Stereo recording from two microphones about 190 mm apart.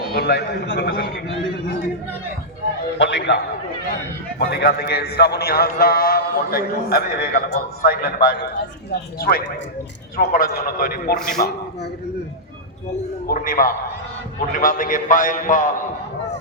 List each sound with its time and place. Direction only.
0.1 s a man's voice: 55° left (ahead or behind)
3.0 s a man's voice: 65° left (ahead or behind)
10.2 s a man's voice: 40° left (ahead or behind)
13.2 s a man's voice: 50° left (ahead or behind)